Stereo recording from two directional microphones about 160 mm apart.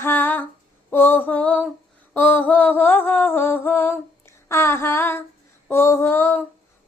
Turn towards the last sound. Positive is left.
turn(degrees=15)  # may be behind; listen again after turning